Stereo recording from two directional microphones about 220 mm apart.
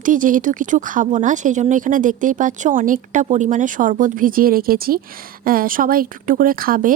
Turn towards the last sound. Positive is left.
turn(degrees=-40)  # may be behind; listen again after turning